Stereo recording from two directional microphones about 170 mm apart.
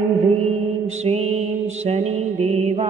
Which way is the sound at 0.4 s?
35° right (ahead or behind).